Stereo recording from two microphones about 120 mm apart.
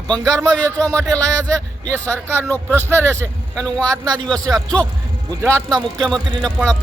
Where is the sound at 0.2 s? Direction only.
25° right (ahead or behind).